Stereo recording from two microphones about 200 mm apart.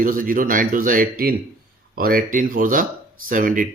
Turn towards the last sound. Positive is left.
turn(degrees=-40)  # may be behind; listen again after turning